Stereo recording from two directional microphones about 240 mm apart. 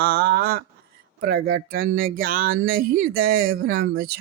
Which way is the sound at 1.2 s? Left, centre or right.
Right.